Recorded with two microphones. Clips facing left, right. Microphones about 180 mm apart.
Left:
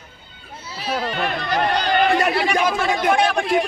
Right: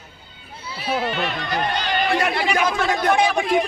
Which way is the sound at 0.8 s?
5° right (ahead or behind).